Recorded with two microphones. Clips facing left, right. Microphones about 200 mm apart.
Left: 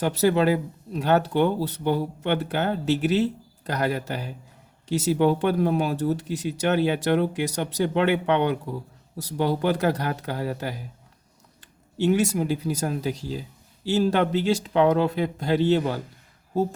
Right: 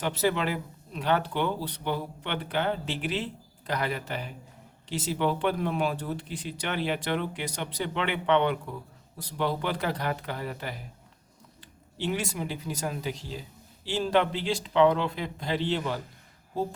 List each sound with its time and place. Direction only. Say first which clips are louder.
0.0 s speech: left 7 dB; 40° left (ahead or behind)
11.9 s speech: left 9 dB; 45° left (ahead or behind)